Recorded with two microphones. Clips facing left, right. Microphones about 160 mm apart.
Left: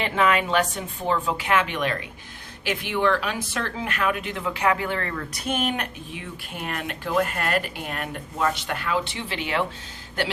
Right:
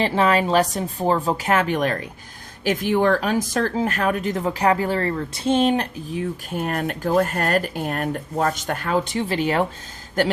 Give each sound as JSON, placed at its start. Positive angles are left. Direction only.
{"t": 0.0, "sound": "speech", "side_deg": -35}